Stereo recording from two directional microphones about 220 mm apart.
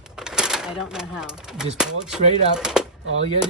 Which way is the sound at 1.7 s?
5° right (ahead or behind).